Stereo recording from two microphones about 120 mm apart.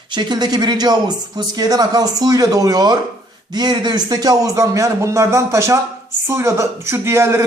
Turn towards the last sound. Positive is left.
turn(degrees=-25)  # may be behind; listen again after turning